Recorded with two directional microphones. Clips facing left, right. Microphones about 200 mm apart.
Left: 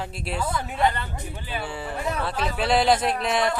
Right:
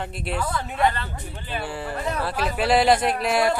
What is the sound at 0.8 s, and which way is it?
Speech, 15° left (ahead or behind).